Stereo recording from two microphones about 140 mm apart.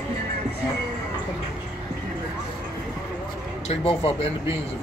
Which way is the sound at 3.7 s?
45° left (ahead or behind).